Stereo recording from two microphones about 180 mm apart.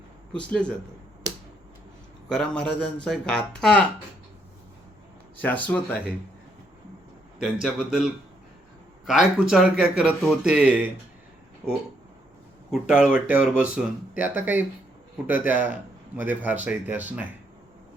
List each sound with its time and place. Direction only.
0.3 s speech: 5° left (ahead or behind)
2.3 s speech: 5° left (ahead or behind)
5.4 s speech: 10° left (ahead or behind)
7.3 s speech: centre (ahead or behind)
12.9 s a man's voice: 5° right (ahead or behind)